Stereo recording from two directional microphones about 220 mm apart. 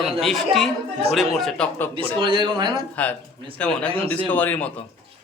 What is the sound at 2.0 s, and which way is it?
Speech, 20° right (ahead or behind).